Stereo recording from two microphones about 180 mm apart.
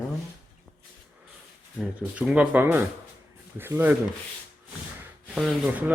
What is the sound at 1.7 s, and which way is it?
Speech, 5° right (ahead or behind).